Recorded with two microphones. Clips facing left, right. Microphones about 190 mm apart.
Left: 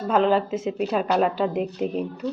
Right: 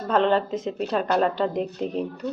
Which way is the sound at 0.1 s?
5° left (ahead or behind).